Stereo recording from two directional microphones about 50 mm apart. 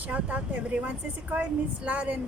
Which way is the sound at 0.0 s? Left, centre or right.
Right.